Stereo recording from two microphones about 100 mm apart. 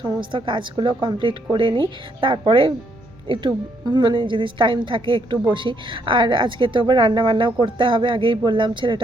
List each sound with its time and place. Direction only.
0.0 s a woman's voice: 55° right (ahead or behind)
3.8 s a woman's voice: 50° right (ahead or behind)